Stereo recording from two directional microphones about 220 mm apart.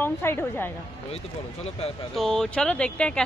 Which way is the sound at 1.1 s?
25° left (ahead or behind).